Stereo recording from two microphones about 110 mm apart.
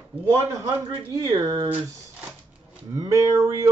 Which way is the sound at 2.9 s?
30° right (ahead or behind).